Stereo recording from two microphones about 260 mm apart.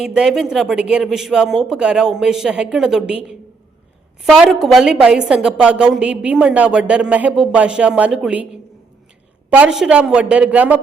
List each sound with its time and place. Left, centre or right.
0.0 s a woman's voice: centre
4.2 s a woman's voice: centre
9.5 s a woman's voice: centre